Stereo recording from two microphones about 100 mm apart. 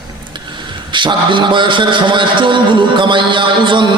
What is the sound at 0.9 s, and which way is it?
A man's voice, 55° right (ahead or behind).